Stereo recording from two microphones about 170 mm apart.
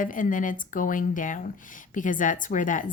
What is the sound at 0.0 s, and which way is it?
Speech, 50° left (ahead or behind).